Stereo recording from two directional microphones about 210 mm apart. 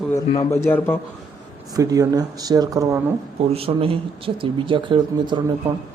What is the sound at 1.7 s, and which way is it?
Speech, 15° right (ahead or behind).